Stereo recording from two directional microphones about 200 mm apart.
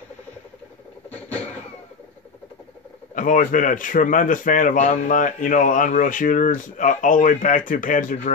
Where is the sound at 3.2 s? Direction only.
40° left (ahead or behind).